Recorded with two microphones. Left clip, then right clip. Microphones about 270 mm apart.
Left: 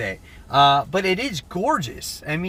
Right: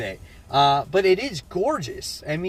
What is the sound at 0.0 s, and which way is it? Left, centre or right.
A man's voice, centre.